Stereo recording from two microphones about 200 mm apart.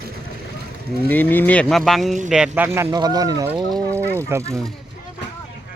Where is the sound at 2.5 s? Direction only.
10° right (ahead or behind).